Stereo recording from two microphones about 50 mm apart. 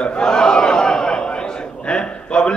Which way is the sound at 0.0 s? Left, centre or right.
Centre.